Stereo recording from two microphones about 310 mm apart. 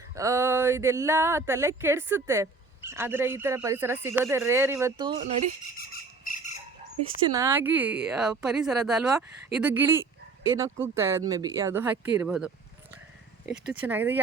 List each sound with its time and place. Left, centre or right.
0.2 s speech: centre
5.6 s squawk: left
7.2 s speech: centre
13.8 s speech: centre